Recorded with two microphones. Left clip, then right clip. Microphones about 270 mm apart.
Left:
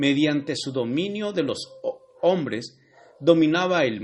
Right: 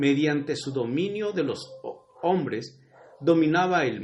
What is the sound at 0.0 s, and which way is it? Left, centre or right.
A man's voice, left.